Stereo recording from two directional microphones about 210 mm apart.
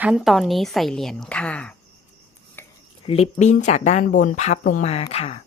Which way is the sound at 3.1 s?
30° left (ahead or behind).